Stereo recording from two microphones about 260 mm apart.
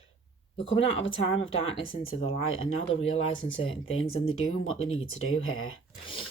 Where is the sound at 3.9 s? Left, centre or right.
Left.